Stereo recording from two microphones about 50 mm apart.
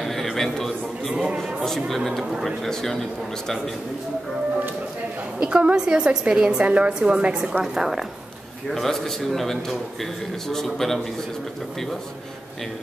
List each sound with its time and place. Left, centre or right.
0.0 s a sound: centre
1.1 s a sound: centre
2.0 s a man's voice: centre
5.4 s a woman's voice: right
7.6 s a woman's voice: centre
8.7 s a man's voice: centre